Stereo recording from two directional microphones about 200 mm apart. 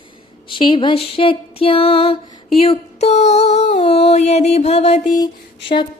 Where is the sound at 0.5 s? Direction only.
25° left (ahead or behind).